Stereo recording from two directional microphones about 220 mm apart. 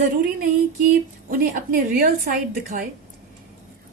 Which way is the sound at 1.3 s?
40° right (ahead or behind).